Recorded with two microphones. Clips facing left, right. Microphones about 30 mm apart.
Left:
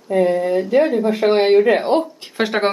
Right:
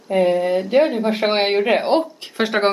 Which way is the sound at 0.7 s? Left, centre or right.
Right.